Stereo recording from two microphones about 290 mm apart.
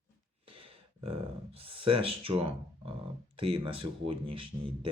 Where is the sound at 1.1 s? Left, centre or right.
Centre.